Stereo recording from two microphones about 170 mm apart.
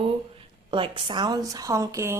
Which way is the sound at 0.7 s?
30° right (ahead or behind).